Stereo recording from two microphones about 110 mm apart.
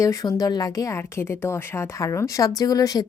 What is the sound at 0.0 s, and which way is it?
Speech, 30° left (ahead or behind).